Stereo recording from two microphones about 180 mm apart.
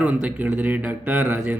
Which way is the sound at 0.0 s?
10° right (ahead or behind).